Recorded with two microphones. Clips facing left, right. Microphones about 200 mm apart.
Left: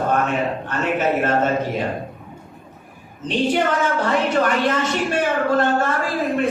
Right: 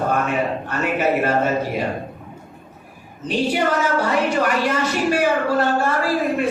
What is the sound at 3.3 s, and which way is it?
Speech, 10° right (ahead or behind).